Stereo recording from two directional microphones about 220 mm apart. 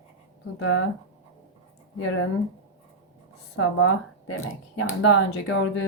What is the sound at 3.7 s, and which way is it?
Speech, 65° left (ahead or behind).